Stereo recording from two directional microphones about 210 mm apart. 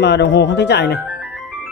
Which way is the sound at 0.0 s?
55° left (ahead or behind).